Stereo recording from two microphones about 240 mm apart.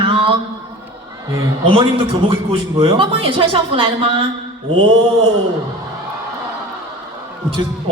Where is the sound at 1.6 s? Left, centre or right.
Right.